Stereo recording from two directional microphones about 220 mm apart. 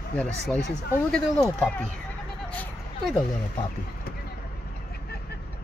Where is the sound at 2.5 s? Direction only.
Centre (ahead or behind).